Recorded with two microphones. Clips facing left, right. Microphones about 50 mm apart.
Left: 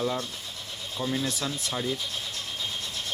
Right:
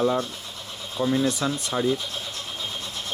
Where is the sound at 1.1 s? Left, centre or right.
Centre.